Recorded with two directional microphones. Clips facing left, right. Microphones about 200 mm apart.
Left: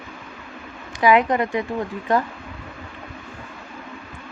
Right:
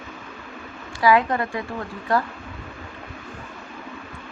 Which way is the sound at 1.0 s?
20° left (ahead or behind).